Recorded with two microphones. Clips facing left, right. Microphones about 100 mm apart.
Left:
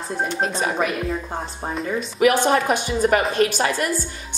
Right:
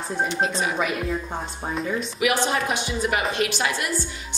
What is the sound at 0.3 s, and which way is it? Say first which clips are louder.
Speech: left 1 dB; 45° left (ahead or behind).